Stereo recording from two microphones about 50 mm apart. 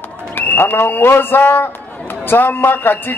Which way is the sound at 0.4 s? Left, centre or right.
Left.